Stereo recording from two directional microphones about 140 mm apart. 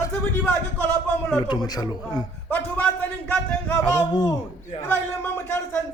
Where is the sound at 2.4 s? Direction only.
15° left (ahead or behind).